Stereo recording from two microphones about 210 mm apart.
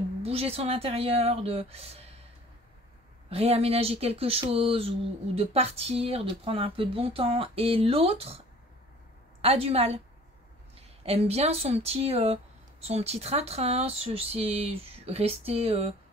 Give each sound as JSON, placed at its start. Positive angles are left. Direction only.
{"t": 0.2, "sound": "speech", "side_deg": -30}
{"t": 3.3, "sound": "speech", "side_deg": -30}
{"t": 9.4, "sound": "speech", "side_deg": -30}
{"t": 11.1, "sound": "speech", "side_deg": -30}